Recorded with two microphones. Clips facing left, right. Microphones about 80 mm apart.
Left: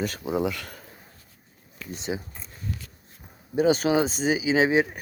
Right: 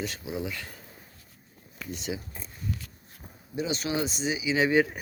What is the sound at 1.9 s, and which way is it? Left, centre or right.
Speech, left.